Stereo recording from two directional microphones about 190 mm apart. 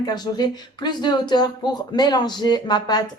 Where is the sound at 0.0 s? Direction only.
20° left (ahead or behind).